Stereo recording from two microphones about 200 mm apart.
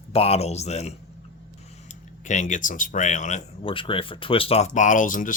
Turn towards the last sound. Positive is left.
turn(degrees=40)  # may be behind; listen again after turning